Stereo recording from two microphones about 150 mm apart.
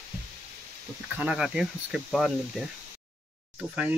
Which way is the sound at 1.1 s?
5° right (ahead or behind).